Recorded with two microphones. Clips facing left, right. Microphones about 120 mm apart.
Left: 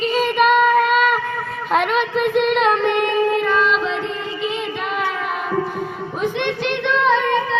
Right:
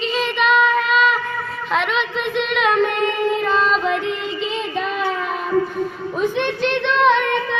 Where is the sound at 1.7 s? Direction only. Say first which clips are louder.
Left 3 dB; 45° left (ahead or behind).